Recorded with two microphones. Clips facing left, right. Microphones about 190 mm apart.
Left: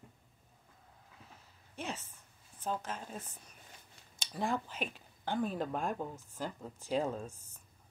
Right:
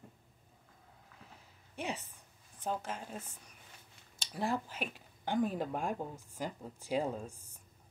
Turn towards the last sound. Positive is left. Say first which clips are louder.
# even
turn(degrees=-10)  # may be behind; listen again after turning